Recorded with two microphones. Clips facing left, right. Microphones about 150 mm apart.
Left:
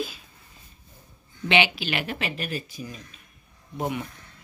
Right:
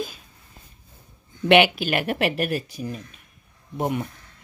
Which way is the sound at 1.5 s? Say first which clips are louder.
Right 7 dB; 50° right (ahead or behind).